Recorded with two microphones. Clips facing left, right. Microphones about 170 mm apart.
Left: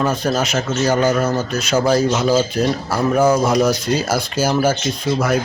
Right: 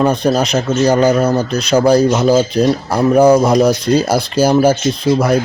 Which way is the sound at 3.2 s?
35° right (ahead or behind).